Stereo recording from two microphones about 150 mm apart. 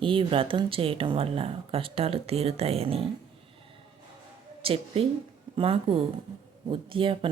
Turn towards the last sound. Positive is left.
turn(degrees=-35)  # may be behind; listen again after turning